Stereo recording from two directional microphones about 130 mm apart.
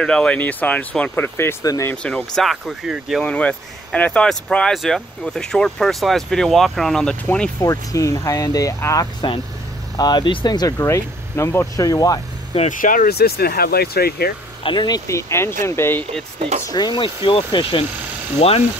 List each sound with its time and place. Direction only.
0.0 s speech: 5° left (ahead or behind); by 1.9 s 25° left (ahead or behind)
1.9 s speech: 10° left (ahead or behind)
7.6 s speech: 25° left (ahead or behind)
10.8 s speech: 20° left (ahead or behind)
12.6 s speech: 90° left
14.6 s speech: 40° left (ahead or behind)
15.0 s speech: 20° left (ahead or behind)
16.3 s speech: 60° right (ahead or behind)
16.6 s speech: 30° left (ahead or behind); by 18.6 s 50° left (ahead or behind)